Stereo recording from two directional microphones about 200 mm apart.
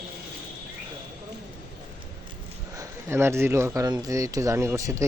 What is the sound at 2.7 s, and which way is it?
Speech, 15° right (ahead or behind).